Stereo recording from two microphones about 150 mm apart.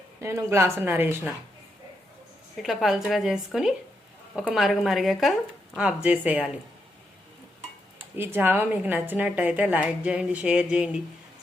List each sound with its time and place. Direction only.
0.2 s a woman's voice: 15° right (ahead or behind)
2.6 s a woman's voice: centre (ahead or behind)
8.1 s a woman's voice: 15° right (ahead or behind)